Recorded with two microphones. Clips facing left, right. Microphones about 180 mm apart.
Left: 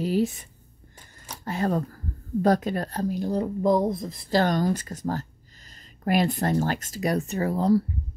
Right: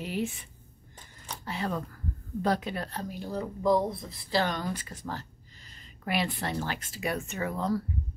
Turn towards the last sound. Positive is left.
turn(degrees=35)  # may be behind; listen again after turning